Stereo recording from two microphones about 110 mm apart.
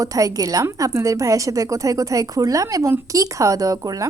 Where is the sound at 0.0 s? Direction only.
30° right (ahead or behind).